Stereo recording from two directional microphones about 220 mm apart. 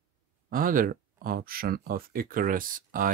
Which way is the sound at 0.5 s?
40° right (ahead or behind).